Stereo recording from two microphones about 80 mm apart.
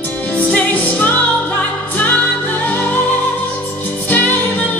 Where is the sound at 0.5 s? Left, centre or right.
Left.